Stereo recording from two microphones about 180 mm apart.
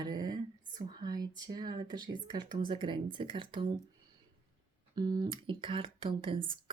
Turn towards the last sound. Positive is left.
turn(degrees=-30)  # may be behind; listen again after turning